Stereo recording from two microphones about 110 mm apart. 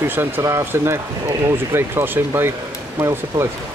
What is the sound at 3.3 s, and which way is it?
Speech, 35° right (ahead or behind).